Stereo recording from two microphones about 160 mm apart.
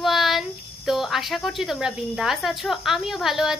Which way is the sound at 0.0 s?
Centre (ahead or behind).